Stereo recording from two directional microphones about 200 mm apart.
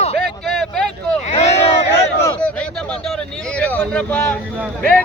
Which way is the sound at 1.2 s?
35° left (ahead or behind).